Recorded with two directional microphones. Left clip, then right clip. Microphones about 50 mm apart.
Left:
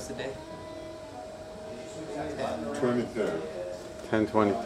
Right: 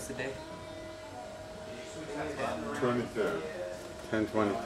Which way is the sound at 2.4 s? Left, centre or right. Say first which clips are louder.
Left 3 dB; right.